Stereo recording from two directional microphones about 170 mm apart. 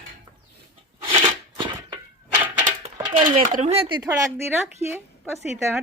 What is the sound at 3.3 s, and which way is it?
Speech, 45° right (ahead or behind).